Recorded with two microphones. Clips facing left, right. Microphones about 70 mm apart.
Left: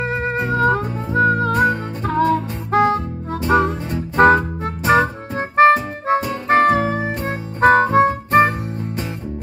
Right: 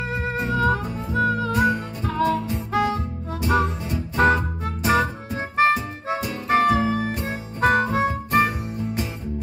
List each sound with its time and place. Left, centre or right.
0.0 s music: left